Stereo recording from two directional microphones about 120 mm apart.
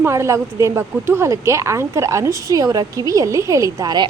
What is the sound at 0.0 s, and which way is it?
Speech, 25° right (ahead or behind).